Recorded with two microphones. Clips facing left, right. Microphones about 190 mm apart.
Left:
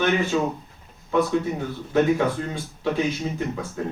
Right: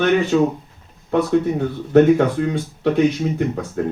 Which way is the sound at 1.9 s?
65° right (ahead or behind).